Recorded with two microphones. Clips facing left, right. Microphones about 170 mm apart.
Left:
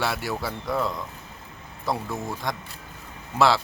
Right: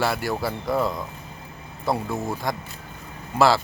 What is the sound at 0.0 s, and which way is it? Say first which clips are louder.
Speech: right 3 dB; centre (ahead or behind).